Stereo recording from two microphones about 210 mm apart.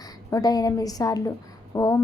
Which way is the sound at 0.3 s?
15° left (ahead or behind).